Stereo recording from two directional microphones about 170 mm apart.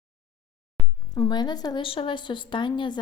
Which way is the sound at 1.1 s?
25° left (ahead or behind).